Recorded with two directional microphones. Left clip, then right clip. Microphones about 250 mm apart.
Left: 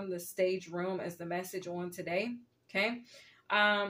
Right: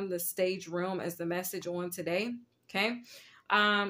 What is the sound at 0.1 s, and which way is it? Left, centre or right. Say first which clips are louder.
Speech: left 2 dB; right.